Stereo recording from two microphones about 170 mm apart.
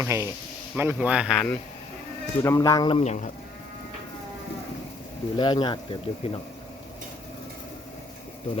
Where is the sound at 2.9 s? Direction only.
40° left (ahead or behind).